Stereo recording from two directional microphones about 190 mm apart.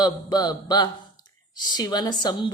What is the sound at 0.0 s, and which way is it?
Speech, 20° left (ahead or behind).